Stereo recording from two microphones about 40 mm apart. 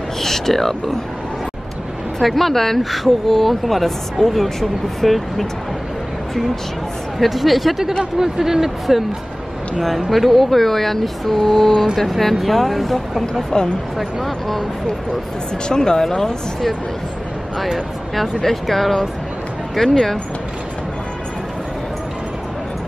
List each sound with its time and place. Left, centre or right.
0.2 s speech: centre
2.2 s speech: centre
2.8 s speech: centre
7.2 s speech: centre
13.3 s speech: centre
13.9 s speech: centre
15.7 s speech: centre
17.7 s speech: centre